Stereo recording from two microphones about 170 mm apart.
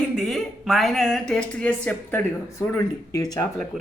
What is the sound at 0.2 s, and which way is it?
Speech, centre (ahead or behind).